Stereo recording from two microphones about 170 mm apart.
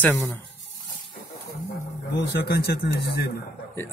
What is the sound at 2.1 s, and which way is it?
Speech, 80° left.